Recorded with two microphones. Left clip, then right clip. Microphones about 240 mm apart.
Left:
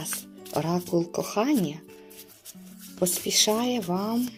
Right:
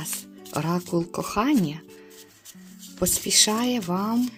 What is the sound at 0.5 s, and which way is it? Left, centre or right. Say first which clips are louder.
Speech: even; right.